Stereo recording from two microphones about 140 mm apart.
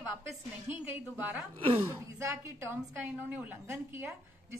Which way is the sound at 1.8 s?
20° right (ahead or behind).